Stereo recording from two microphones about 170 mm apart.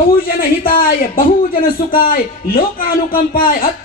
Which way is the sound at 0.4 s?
55° left (ahead or behind).